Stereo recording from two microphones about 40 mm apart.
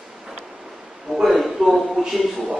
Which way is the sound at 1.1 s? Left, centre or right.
Centre.